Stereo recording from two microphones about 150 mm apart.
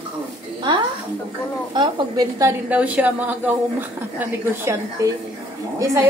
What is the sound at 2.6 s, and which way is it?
Speech, 10° right (ahead or behind).